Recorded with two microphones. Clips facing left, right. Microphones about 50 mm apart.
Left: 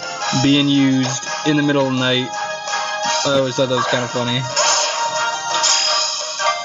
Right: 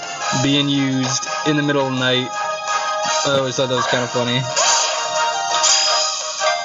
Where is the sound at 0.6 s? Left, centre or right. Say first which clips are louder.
Left 4 dB; left.